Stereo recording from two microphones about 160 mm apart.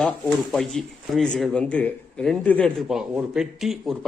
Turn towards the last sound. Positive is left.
turn(degrees=0)  # may be behind; listen again after turning